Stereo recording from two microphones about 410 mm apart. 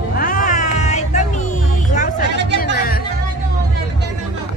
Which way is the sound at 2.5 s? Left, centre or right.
Left.